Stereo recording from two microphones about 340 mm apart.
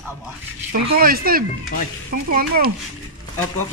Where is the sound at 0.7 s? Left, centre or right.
Right.